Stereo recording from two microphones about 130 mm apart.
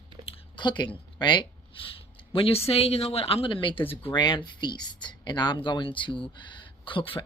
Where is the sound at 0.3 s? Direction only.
35° left (ahead or behind).